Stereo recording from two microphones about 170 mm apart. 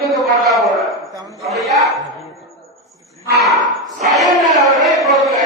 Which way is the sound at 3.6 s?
45° right (ahead or behind).